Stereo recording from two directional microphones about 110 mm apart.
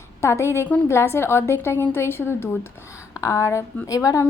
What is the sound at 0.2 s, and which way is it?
Speech, 25° left (ahead or behind).